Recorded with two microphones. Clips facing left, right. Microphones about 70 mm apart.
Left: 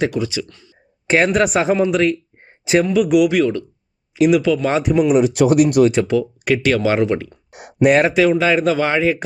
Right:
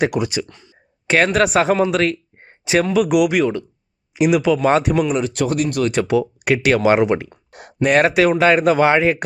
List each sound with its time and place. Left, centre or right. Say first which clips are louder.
0.4 s speech: even; right
1.0 s speech: even; centre
5.1 s speech: left 6 dB; centre
5.9 s speech: even; centre
7.5 s a sound: left 4 dB; centre
7.9 s speech: left 1 dB; centre